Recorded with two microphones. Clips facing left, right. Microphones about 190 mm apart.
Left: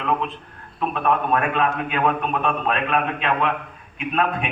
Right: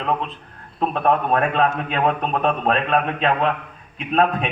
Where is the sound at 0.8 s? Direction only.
35° right (ahead or behind).